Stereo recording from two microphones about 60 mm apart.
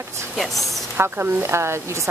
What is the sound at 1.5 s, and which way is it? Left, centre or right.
Speech, right.